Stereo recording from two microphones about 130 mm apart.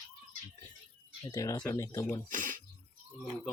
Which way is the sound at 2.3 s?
90° right.